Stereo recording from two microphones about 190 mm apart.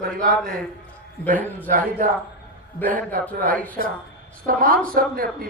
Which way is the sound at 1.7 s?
45° right (ahead or behind).